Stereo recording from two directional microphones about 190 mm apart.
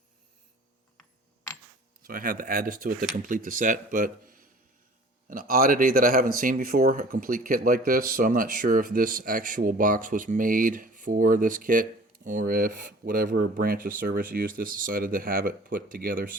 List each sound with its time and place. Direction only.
2.0 s speech: 50° right (ahead or behind)